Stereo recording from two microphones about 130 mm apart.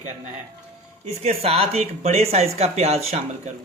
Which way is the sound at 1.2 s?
50° right (ahead or behind).